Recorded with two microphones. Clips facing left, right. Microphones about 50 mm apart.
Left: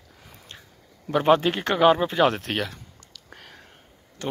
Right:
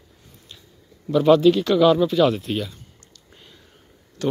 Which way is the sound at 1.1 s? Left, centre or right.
Left.